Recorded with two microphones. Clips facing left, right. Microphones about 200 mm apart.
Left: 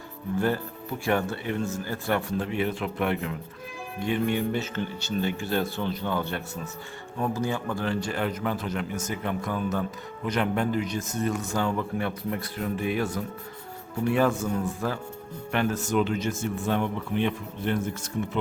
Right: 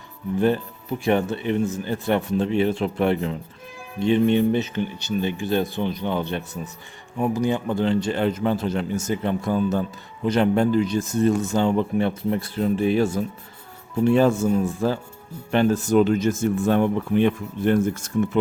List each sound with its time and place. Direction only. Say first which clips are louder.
0.3 s speech: right 6 dB; 20° right (ahead or behind); by 18.1 s 45° right (ahead or behind)